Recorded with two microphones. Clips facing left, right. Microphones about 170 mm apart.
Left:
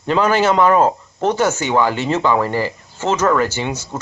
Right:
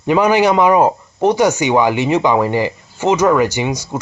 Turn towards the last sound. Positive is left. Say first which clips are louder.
# right 4 dB
turn(degrees=-15)  # may be behind; listen again after turning